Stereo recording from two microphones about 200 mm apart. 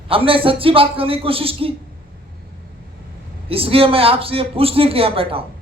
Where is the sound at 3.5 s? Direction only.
30° right (ahead or behind).